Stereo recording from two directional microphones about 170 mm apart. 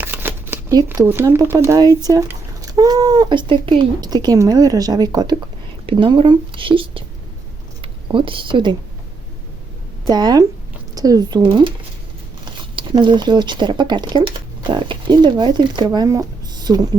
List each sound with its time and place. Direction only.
0.0 s shuffling cards: 10° right (ahead or behind)
0.9 s speech: 10° right (ahead or behind); by 7.0 s 30° right (ahead or behind)
7.8 s a sound: 30° right (ahead or behind)
10.1 s speech: 25° right (ahead or behind)
12.7 s speech: 25° right (ahead or behind)